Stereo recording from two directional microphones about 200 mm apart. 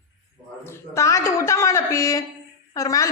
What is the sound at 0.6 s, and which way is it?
A woman's voice, 15° left (ahead or behind).